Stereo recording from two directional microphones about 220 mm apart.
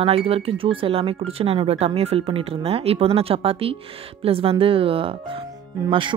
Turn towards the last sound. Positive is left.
turn(degrees=-20)  # may be behind; listen again after turning